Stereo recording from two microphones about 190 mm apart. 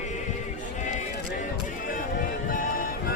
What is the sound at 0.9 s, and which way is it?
Sheep, 40° left (ahead or behind).